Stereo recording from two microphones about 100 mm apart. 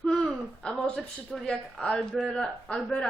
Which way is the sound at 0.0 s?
5° left (ahead or behind).